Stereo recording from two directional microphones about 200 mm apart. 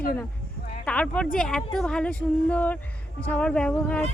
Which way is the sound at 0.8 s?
5° left (ahead or behind).